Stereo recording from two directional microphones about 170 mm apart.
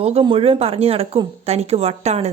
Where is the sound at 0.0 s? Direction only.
35° right (ahead or behind).